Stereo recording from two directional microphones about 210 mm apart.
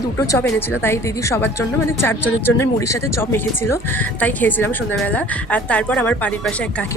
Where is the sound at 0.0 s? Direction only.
15° left (ahead or behind).